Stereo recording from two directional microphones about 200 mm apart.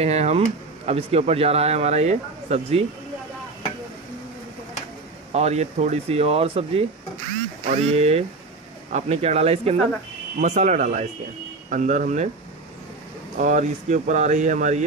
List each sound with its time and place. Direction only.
0.0 s speech: 30° right (ahead or behind)
5.3 s speech: 35° right (ahead or behind)
13.4 s speech: 40° right (ahead or behind)